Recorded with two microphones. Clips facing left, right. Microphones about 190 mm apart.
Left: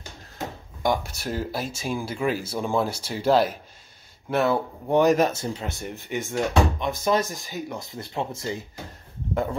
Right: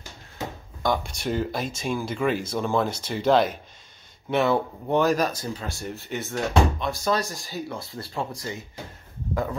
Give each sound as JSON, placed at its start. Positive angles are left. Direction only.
{"t": 0.8, "sound": "speech", "side_deg": 10}